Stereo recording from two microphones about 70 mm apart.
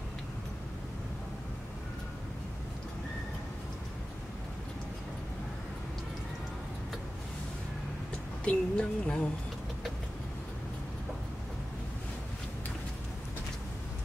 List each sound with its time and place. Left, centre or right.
8.5 s music: centre